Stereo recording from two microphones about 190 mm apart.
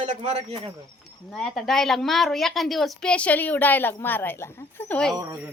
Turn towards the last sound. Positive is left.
turn(degrees=-15)  # may be behind; listen again after turning